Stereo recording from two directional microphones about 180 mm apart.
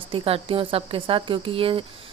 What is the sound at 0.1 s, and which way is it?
A woman's voice, 30° right (ahead or behind).